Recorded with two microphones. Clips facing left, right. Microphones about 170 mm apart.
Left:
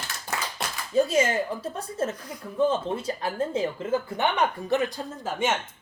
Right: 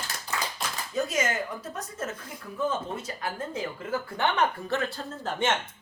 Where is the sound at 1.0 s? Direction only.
30° left (ahead or behind).